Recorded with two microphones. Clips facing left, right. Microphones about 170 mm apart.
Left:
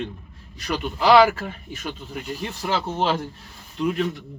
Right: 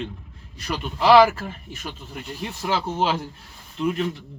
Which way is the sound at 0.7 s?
Centre (ahead or behind).